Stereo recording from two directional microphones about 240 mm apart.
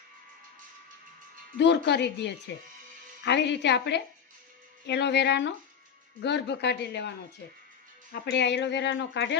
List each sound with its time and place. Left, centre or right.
1.5 s speech: left
8.1 s speech: left